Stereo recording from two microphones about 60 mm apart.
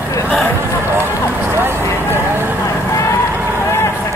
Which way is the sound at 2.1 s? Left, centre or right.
Right.